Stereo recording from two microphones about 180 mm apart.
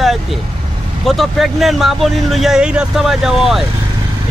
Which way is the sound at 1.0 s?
Centre (ahead or behind).